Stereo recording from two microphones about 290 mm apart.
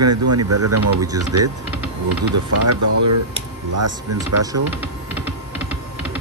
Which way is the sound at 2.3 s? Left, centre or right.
Right.